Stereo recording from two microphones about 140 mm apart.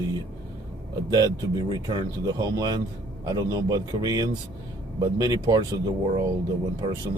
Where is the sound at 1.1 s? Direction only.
30° right (ahead or behind).